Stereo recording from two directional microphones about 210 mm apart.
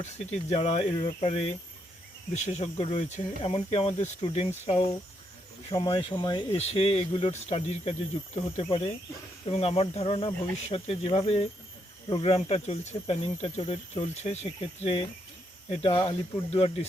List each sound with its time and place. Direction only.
0.0 s speech: 30° left (ahead or behind)